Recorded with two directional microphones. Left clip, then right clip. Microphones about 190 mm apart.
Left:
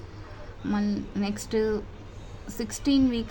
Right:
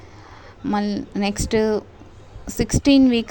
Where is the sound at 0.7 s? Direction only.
40° right (ahead or behind).